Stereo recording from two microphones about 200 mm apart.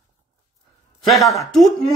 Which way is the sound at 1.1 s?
Centre (ahead or behind).